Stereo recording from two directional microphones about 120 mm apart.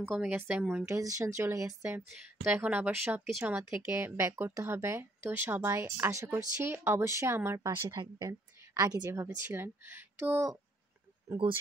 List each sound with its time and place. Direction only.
0.0 s speech: 10° right (ahead or behind)
0.8 s speech: 25° right (ahead or behind)
7.7 s speech: 35° right (ahead or behind); by 10.5 s 20° right (ahead or behind)